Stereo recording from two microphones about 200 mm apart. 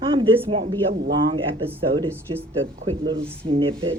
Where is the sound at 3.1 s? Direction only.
25° right (ahead or behind).